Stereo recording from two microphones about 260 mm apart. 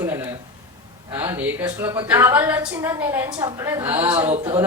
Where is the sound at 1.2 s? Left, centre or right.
Centre.